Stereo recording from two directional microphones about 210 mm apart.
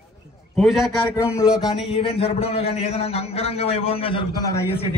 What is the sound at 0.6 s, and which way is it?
Speech, centre (ahead or behind).